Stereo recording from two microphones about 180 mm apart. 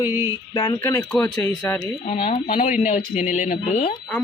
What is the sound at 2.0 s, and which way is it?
Speech, 35° left (ahead or behind).